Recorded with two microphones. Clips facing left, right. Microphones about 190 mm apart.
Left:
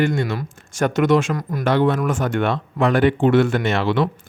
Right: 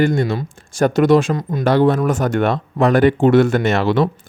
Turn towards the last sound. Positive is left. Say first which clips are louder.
# right 3 dB
turn(degrees=-40)  # may be behind; listen again after turning